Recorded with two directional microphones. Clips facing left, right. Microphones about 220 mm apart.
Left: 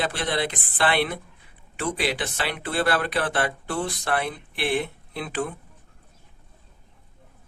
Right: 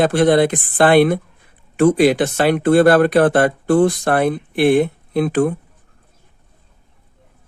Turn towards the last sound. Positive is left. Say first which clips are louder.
# right 13 dB
turn(degrees=-50)  # may be behind; listen again after turning